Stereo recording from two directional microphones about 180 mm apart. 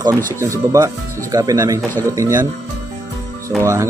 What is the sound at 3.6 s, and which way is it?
Speech, 15° right (ahead or behind).